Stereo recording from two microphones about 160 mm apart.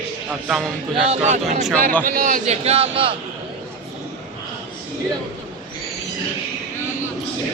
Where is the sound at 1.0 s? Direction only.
40° right (ahead or behind).